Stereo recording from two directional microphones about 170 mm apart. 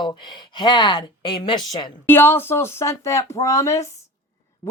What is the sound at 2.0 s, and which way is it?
Speech, 10° left (ahead or behind).